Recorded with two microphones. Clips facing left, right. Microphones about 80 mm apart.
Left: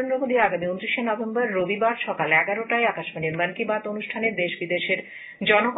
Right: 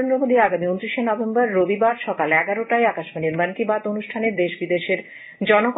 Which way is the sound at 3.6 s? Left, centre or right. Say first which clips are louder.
Right 4 dB; right.